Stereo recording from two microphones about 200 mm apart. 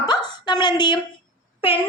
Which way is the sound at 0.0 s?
20° left (ahead or behind).